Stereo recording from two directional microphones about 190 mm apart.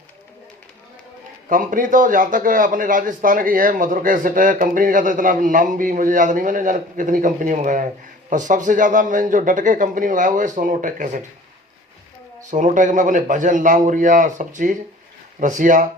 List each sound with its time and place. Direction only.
1.5 s a man's voice: 45° right (ahead or behind)
12.5 s a man's voice: 40° right (ahead or behind)